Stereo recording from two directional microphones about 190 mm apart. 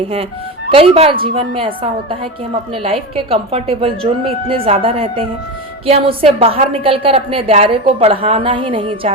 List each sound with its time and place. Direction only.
0.7 s a woman's voice: 30° right (ahead or behind)